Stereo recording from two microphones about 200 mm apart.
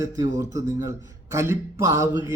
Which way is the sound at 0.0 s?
15° right (ahead or behind).